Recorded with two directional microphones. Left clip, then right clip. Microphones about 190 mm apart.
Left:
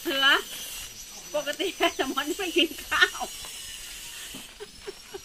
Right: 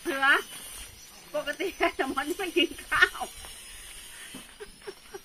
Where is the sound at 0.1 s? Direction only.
55° left (ahead or behind).